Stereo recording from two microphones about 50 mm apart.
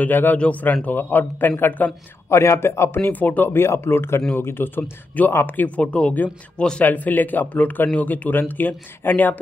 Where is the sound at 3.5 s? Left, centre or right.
Left.